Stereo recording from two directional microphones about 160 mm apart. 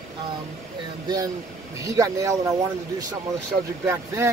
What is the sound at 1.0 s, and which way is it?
Speech, 25° right (ahead or behind).